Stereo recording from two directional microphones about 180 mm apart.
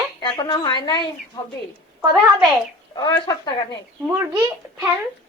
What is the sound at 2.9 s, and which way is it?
Speech, 20° left (ahead or behind).